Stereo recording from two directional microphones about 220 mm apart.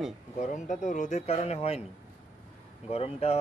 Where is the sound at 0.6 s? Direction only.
35° left (ahead or behind).